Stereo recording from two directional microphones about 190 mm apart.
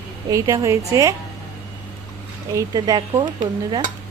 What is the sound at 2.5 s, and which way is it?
Speech, 20° right (ahead or behind).